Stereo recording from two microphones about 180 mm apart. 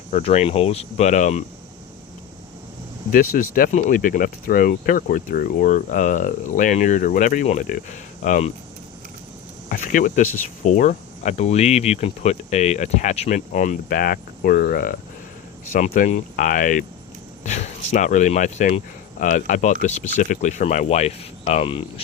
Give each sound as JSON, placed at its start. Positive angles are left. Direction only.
{"t": 0.1, "sound": "speech", "side_deg": 35}
{"t": 3.1, "sound": "speech", "side_deg": 50}
{"t": 9.6, "sound": "speech", "side_deg": 50}